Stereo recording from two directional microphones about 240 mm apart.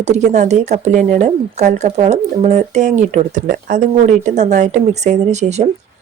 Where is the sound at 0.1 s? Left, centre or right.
Right.